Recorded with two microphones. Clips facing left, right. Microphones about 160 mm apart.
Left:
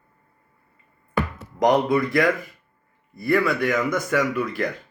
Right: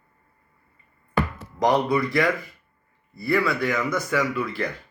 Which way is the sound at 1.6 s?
50° left (ahead or behind).